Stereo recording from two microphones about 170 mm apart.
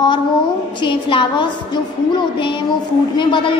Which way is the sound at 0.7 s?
30° left (ahead or behind).